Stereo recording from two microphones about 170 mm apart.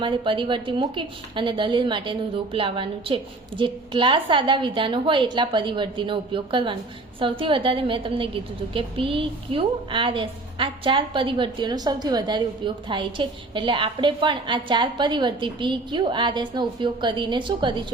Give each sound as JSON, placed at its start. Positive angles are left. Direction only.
{"t": 0.0, "sound": "a woman's voice", "side_deg": -30}